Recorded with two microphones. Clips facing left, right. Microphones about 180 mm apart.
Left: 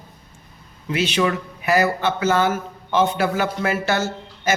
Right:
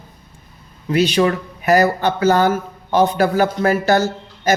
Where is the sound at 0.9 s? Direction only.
35° right (ahead or behind).